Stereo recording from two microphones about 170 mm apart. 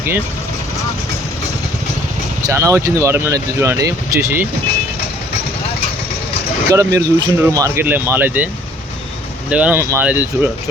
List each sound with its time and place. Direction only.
2.5 s speech: 15° right (ahead or behind)
6.7 s speech: 20° right (ahead or behind)
9.5 s speech: 10° right (ahead or behind)